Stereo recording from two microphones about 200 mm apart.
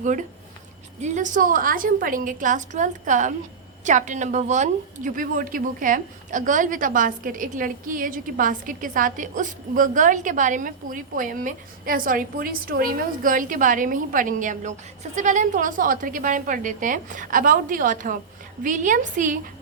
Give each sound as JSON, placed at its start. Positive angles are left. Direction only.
{"t": 0.0, "sound": "a woman's voice", "side_deg": -40}